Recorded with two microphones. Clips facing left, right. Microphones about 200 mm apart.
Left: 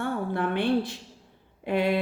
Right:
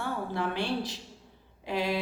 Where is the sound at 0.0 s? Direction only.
55° left (ahead or behind).